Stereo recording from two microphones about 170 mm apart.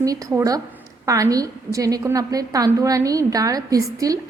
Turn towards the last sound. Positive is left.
turn(degrees=-20)  # may be behind; listen again after turning